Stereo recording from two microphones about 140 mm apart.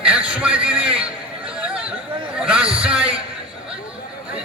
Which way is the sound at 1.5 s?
10° right (ahead or behind).